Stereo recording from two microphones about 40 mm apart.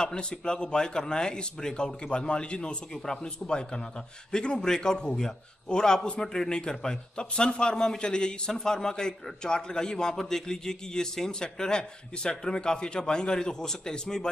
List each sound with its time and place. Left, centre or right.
0.0 s a man's voice: left